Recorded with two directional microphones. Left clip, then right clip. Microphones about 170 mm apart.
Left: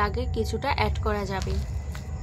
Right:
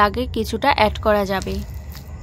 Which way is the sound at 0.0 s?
65° right (ahead or behind).